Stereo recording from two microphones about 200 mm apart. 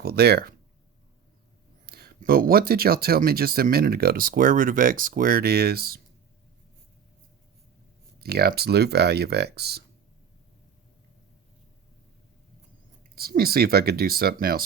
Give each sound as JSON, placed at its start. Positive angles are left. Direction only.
{"t": 0.0, "sound": "speech", "side_deg": -50}
{"t": 1.9, "sound": "speech", "side_deg": -50}
{"t": 8.2, "sound": "speech", "side_deg": -50}
{"t": 13.1, "sound": "speech", "side_deg": -50}